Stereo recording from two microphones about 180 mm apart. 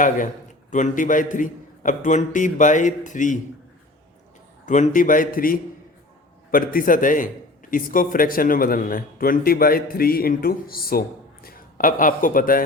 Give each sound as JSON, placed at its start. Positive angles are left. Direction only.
{"t": 0.7, "sound": "a man's voice", "side_deg": 45}
{"t": 4.6, "sound": "a man's voice", "side_deg": 45}